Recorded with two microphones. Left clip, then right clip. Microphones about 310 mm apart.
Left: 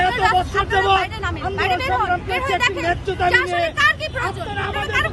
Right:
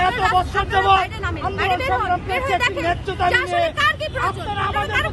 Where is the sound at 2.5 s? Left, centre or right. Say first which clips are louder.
Left 1 dB; centre.